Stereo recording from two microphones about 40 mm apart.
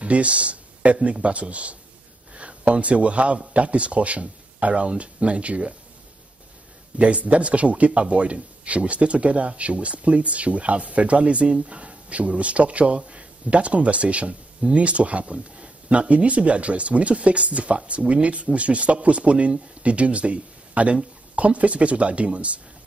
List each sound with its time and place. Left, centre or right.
0.0 s speech: right
7.0 s speech: right